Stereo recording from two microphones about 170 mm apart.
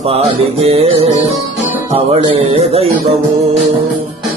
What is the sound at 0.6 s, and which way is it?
Music, 35° right (ahead or behind).